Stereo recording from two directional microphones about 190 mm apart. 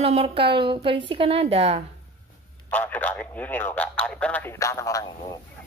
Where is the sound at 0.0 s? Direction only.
30° right (ahead or behind).